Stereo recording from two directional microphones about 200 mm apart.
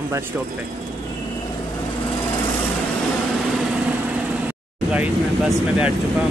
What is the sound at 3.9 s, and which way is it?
Vehicle, 5° right (ahead or behind).